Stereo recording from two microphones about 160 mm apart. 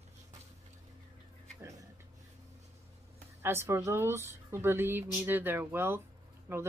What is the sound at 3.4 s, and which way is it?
Speech, 15° right (ahead or behind).